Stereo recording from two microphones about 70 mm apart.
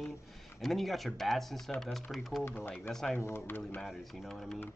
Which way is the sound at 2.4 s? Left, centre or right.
Left.